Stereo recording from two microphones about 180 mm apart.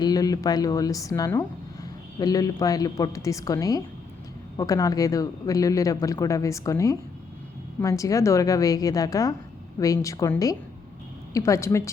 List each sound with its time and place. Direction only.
0.0 s a woman's voice: 20° left (ahead or behind)